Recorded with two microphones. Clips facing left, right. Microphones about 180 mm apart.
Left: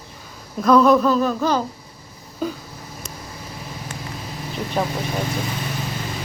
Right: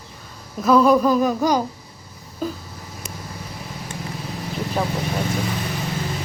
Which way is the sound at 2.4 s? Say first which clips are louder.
Left 1 dB; centre (ahead or behind).